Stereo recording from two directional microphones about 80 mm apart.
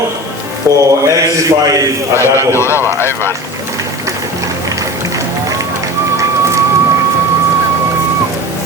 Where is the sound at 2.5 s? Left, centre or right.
Left.